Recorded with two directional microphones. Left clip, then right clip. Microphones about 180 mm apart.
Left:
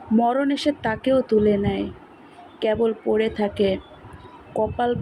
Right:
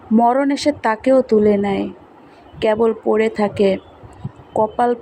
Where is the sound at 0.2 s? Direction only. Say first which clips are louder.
Right 6 dB; 15° right (ahead or behind).